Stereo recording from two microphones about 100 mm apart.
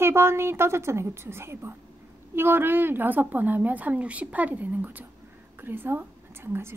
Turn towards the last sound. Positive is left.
turn(degrees=-25)  # may be behind; listen again after turning